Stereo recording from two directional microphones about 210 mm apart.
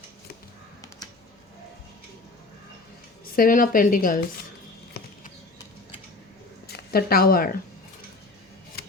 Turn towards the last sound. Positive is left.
turn(degrees=45)  # may be behind; listen again after turning